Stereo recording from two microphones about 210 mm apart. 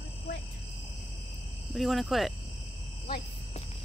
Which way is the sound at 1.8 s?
Centre (ahead or behind).